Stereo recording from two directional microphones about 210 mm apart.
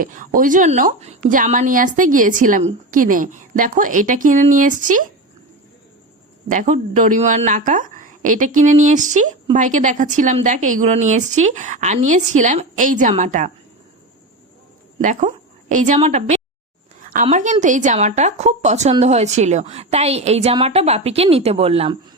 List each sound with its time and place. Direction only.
0.0 s a woman's voice: 40° right (ahead or behind)
6.5 s a woman's voice: 35° right (ahead or behind)
15.0 s a woman's voice: 35° right (ahead or behind)
17.0 s a sound: 40° right (ahead or behind)
17.2 s a woman's voice: 35° right (ahead or behind)